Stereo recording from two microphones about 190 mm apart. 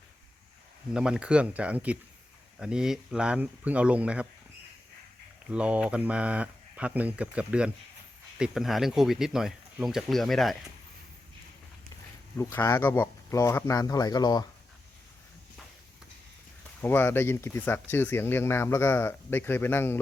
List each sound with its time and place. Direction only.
0.9 s speech: 5° right (ahead or behind)
5.5 s speech: 5° right (ahead or behind)
12.4 s speech: 10° left (ahead or behind)
16.8 s speech: 10° left (ahead or behind)